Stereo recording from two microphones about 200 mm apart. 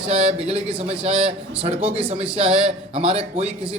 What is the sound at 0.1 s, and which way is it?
A man's voice, 30° right (ahead or behind).